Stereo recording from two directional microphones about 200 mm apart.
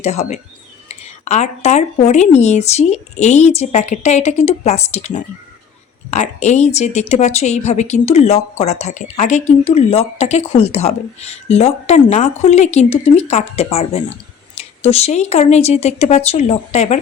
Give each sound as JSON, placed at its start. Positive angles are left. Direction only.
{"t": 0.0, "sound": "speech", "side_deg": 30}